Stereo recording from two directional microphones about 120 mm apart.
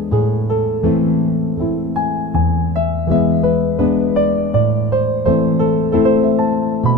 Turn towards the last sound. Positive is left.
turn(degrees=-60)  # may be behind; listen again after turning